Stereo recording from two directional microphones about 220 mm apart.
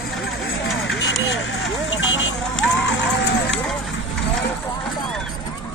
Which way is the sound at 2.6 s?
55° left (ahead or behind).